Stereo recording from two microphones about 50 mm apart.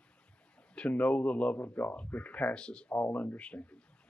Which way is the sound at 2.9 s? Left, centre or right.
Left.